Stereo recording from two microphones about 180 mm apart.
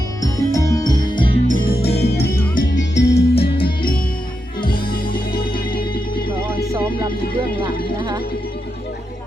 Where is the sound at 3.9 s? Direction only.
55° left (ahead or behind).